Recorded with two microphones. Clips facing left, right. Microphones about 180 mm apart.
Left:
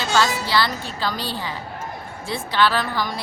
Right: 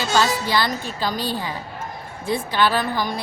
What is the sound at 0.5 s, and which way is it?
Speech, 15° right (ahead or behind).